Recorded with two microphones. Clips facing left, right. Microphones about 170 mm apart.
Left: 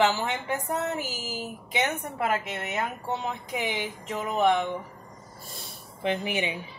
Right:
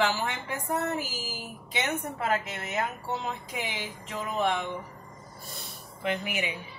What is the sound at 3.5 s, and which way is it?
Speech, 20° left (ahead or behind).